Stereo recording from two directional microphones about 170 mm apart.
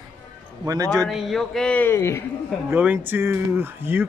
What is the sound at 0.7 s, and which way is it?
Speech, 20° right (ahead or behind).